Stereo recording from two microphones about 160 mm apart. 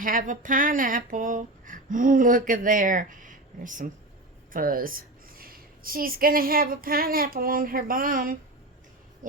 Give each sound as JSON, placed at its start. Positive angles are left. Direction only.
{"t": 0.0, "sound": "a woman's voice", "side_deg": -55}